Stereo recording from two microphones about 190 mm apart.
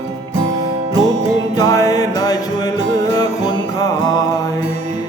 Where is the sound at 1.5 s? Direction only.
20° left (ahead or behind).